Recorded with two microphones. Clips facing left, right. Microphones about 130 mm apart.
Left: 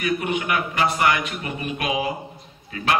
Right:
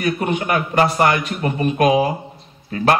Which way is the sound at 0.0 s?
40° right (ahead or behind).